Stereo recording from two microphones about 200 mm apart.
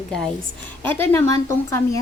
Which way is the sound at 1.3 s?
15° left (ahead or behind).